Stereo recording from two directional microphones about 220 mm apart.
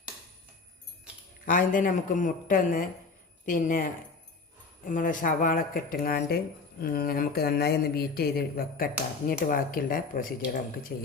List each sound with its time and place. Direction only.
1.5 s speech: 40° left (ahead or behind)
4.9 s speech: 35° left (ahead or behind)